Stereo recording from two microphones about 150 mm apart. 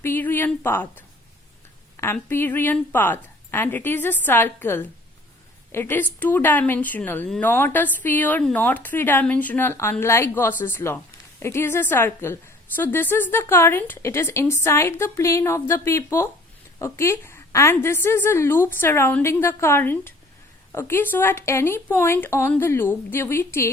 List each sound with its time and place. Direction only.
0.0 s a woman's voice: 15° left (ahead or behind)